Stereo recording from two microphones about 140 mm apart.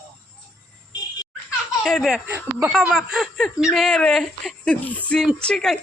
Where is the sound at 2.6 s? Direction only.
5° right (ahead or behind).